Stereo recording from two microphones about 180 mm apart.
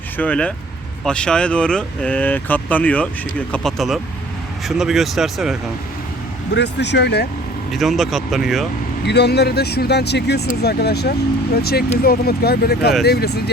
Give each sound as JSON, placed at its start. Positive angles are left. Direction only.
{"t": 0.2, "sound": "speech", "side_deg": 5}
{"t": 6.5, "sound": "speech", "side_deg": 75}
{"t": 7.7, "sound": "speech", "side_deg": 0}
{"t": 9.0, "sound": "speech", "side_deg": 70}